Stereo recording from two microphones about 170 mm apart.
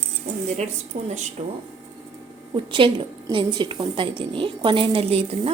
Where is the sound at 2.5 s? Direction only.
30° right (ahead or behind).